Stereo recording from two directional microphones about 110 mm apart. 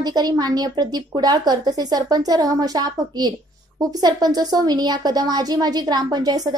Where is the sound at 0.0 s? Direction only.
35° right (ahead or behind).